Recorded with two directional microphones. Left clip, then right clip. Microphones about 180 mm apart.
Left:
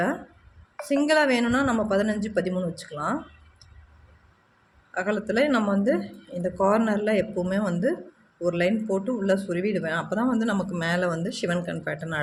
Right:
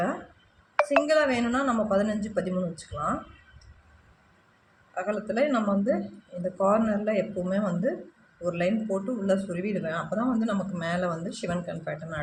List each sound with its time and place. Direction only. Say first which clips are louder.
0.9 s speech: left 3 dB; 45° left (ahead or behind)
4.9 s speech: left 3 dB; 55° left (ahead or behind)